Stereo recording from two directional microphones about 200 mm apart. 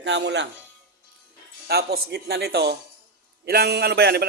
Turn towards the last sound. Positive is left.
turn(degrees=-55)  # may be behind; listen again after turning